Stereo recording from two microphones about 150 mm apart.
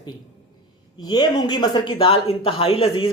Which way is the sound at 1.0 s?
30° left (ahead or behind).